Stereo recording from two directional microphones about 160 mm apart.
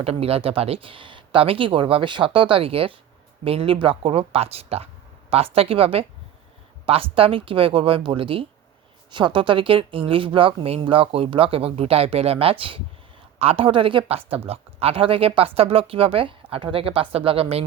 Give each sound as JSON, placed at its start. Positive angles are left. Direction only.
{"t": 0.0, "sound": "speech", "side_deg": -40}